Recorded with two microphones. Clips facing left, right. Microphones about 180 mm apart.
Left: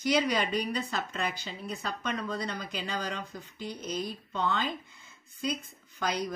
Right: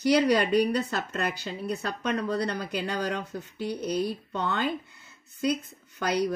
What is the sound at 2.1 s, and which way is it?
Speech, 65° right (ahead or behind).